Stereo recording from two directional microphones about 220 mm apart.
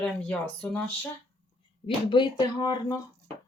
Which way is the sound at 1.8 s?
20° left (ahead or behind).